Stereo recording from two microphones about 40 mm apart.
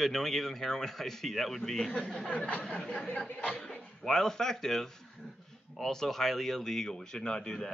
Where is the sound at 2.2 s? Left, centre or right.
Left.